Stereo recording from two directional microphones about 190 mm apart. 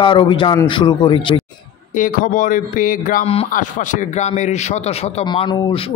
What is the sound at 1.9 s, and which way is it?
Speech, 45° left (ahead or behind).